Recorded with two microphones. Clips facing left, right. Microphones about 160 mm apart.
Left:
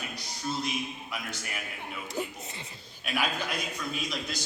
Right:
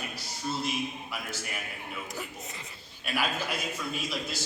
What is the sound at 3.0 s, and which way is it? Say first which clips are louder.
A man's voice: even; 5° right (ahead or behind).